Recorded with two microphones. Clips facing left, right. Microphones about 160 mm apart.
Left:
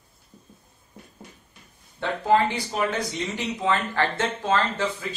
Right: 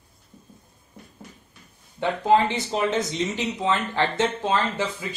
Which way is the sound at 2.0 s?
20° right (ahead or behind).